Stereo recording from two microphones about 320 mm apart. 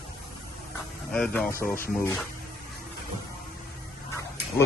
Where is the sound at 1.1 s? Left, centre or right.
Centre.